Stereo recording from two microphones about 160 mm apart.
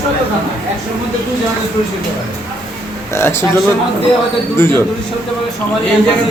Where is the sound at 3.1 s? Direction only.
15° left (ahead or behind).